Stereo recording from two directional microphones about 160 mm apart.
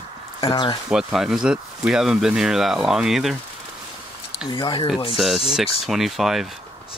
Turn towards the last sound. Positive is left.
turn(degrees=0)  # may be behind; listen again after turning